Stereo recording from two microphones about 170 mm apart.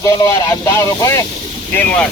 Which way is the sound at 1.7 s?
5° left (ahead or behind).